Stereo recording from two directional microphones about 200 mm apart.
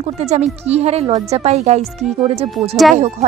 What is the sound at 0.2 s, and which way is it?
Speech, 35° right (ahead or behind).